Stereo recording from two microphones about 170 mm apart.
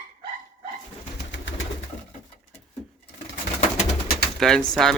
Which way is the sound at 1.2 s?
90° left.